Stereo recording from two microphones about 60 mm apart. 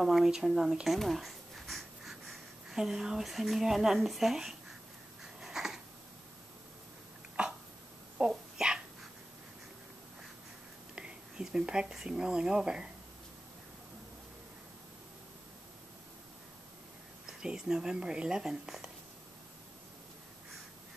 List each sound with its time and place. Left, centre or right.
0.0 s speech: centre
5.2 s a sound: centre
7.4 s throat clearing: centre
8.2 s a sound: centre
11.0 s speech: centre
17.3 s speech: centre